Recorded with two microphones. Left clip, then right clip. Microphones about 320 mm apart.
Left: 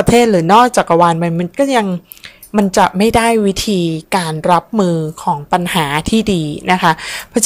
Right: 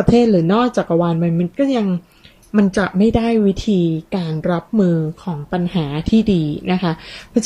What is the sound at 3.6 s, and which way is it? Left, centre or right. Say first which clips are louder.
Speech: left 2 dB; left.